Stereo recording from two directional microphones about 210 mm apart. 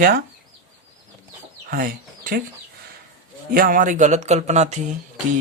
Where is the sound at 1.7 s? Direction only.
40° right (ahead or behind).